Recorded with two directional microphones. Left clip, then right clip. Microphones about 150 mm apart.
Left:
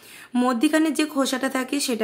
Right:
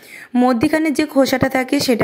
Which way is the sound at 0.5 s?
40° right (ahead or behind).